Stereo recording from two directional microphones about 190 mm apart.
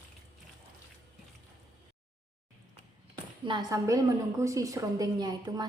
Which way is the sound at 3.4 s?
25° right (ahead or behind).